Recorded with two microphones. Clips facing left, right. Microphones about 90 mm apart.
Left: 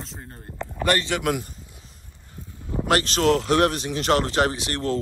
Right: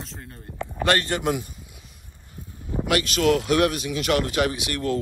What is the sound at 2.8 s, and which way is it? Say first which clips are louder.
Speech: left 1 dB; 35° left (ahead or behind).